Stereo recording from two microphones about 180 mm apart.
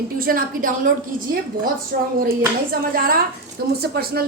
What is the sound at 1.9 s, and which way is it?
Hands, 55° right (ahead or behind).